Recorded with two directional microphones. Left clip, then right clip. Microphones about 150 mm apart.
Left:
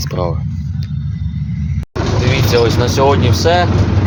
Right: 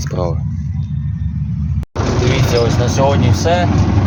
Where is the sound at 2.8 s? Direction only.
25° left (ahead or behind).